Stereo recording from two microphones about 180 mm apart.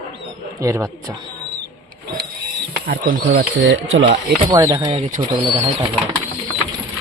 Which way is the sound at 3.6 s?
85° right.